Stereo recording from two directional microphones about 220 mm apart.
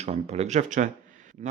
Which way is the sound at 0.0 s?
30° right (ahead or behind).